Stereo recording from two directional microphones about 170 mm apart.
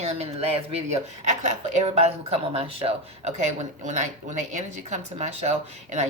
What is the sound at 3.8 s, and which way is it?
Speech, 45° right (ahead or behind).